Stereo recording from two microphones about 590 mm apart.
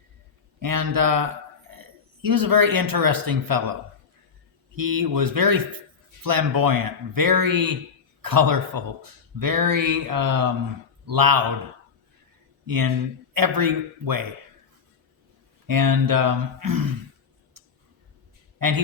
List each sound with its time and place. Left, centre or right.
0.6 s speech: right
1.7 s a sound: right
2.2 s speech: right
4.8 s a man's voice: right
12.6 s speech: right
15.6 s speech: right
17.6 s tick: right
18.6 s speech: right